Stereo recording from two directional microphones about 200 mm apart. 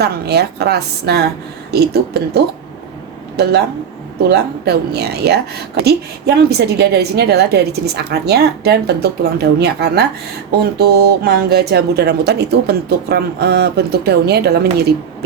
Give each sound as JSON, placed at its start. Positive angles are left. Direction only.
{"t": 0.0, "sound": "a woman's voice", "side_deg": -55}
{"t": 4.2, "sound": "a woman's voice", "side_deg": -55}